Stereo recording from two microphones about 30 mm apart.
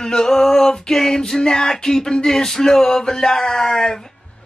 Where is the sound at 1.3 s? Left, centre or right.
Left.